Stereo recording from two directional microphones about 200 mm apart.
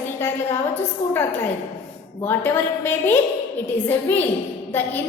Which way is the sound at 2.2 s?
10° left (ahead or behind).